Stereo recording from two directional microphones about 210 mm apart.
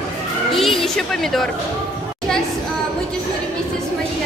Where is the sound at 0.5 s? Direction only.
Centre (ahead or behind).